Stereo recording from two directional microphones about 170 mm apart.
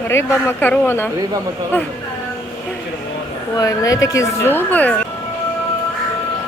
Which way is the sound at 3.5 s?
20° left (ahead or behind).